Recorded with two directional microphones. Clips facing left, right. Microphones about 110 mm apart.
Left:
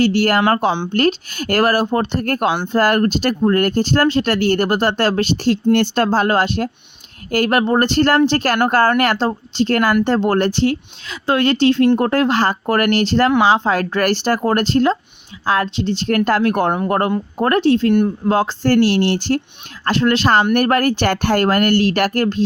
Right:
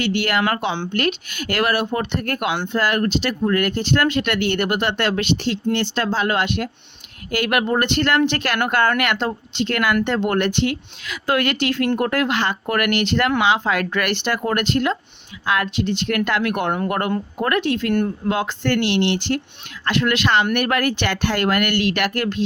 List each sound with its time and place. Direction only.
0.0 s speech: 40° left (ahead or behind)